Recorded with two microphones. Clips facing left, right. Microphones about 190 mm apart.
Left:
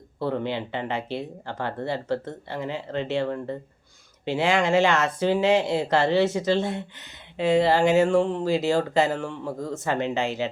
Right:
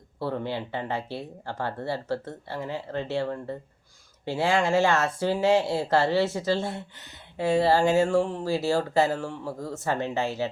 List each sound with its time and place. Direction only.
0.2 s speech: 20° left (ahead or behind)
4.3 s speech: 20° left (ahead or behind)